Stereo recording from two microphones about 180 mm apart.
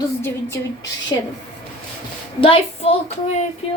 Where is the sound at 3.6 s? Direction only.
30° left (ahead or behind).